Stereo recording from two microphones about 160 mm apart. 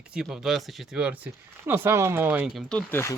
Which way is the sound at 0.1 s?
5° right (ahead or behind).